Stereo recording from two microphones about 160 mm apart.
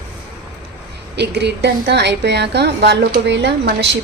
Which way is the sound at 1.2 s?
90° right.